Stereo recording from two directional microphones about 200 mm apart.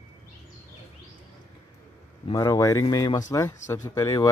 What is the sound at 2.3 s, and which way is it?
Speech, 20° left (ahead or behind).